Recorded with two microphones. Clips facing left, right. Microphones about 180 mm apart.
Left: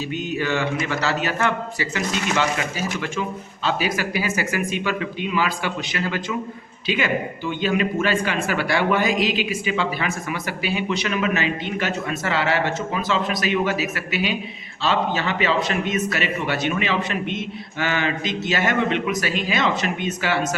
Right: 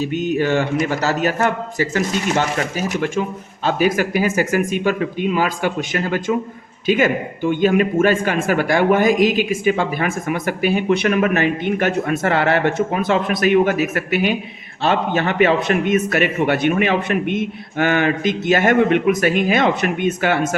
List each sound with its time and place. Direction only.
0.0 s speech: 45° right (ahead or behind)